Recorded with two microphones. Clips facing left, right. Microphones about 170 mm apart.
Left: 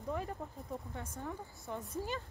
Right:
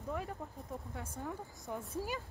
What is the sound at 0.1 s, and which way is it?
A woman's voice, centre (ahead or behind).